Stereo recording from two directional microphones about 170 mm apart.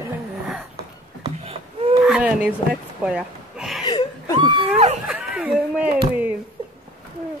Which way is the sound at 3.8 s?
25° left (ahead or behind).